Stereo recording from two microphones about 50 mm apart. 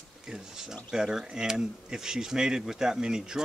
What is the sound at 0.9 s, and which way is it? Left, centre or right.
Speech, centre.